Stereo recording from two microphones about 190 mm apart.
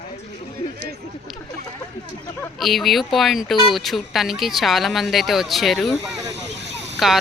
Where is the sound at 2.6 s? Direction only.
Centre (ahead or behind).